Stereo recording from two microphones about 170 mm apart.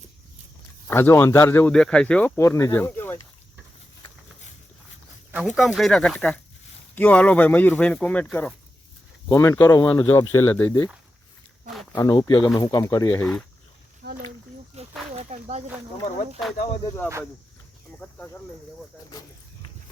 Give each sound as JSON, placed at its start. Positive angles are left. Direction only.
{"t": 0.9, "sound": "speech", "side_deg": 15}
{"t": 5.3, "sound": "speech", "side_deg": 0}
{"t": 11.9, "sound": "speech", "side_deg": 20}
{"t": 14.8, "sound": "snake", "side_deg": -40}